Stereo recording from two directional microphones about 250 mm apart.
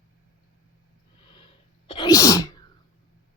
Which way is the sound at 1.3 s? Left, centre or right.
Left.